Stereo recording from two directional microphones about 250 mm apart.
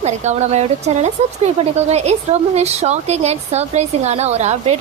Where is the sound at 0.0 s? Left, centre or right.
Right.